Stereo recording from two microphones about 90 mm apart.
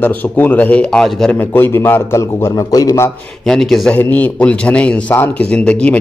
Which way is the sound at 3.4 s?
5° left (ahead or behind).